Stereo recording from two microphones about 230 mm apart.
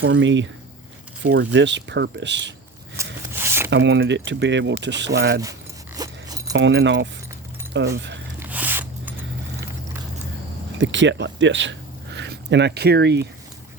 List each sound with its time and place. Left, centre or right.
0.0 s speech: right
3.0 s rub: centre
3.3 s squish: centre
3.7 s speech: right
6.0 s zipper: centre
6.5 s speech: right
8.4 s zipper: centre
10.8 s speech: right